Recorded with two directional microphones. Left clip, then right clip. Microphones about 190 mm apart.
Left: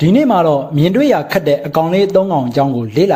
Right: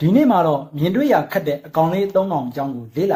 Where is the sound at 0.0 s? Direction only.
35° left (ahead or behind).